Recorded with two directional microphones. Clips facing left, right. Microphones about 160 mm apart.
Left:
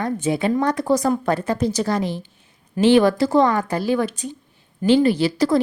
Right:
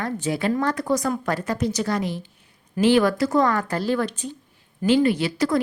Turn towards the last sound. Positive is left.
turn(degrees=30)  # may be behind; listen again after turning